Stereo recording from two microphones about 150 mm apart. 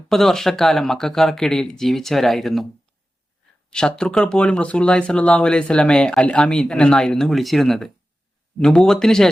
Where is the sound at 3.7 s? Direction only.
5° left (ahead or behind).